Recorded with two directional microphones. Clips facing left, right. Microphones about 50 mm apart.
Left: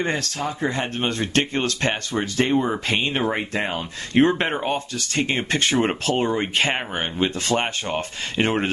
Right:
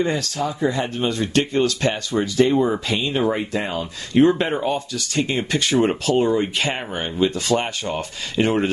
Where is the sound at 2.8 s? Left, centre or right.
Left.